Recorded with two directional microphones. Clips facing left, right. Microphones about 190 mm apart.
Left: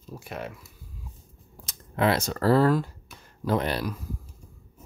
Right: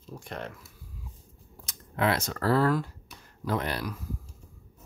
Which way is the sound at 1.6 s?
30° left (ahead or behind).